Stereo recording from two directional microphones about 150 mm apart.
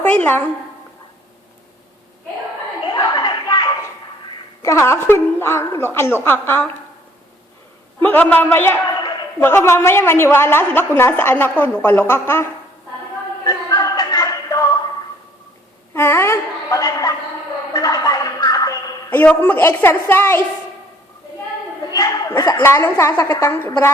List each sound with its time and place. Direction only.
0.0 s a woman's voice: 10° left (ahead or behind)
2.9 s a sound: 30° left (ahead or behind)
4.6 s a woman's voice: 20° left (ahead or behind)
8.0 s a woman's voice: 10° left (ahead or behind)
13.5 s a sound: 25° left (ahead or behind)
16.0 s a woman's voice: 15° left (ahead or behind)
17.7 s music: 25° left (ahead or behind)
19.1 s a woman's voice: 10° left (ahead or behind)
21.9 s a woman's voice: 25° left (ahead or behind)